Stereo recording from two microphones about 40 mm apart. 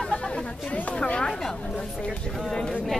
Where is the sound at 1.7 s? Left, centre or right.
Left.